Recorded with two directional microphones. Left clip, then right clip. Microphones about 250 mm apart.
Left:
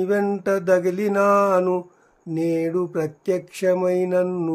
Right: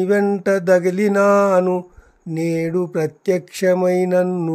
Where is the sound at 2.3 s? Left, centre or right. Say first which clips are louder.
Right 1 dB; right.